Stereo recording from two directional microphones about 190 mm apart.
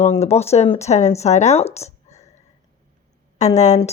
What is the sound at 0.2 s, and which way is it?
Speech, 35° left (ahead or behind).